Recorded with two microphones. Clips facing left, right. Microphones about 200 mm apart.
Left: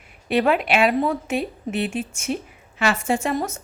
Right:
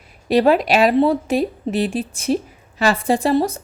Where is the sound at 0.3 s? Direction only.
35° right (ahead or behind).